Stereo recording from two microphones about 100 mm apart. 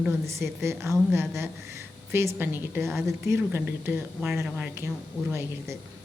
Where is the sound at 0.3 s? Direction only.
30° right (ahead or behind).